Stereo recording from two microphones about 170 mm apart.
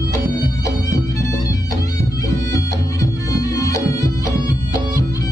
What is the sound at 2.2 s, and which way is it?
Bagpipes, 20° left (ahead or behind).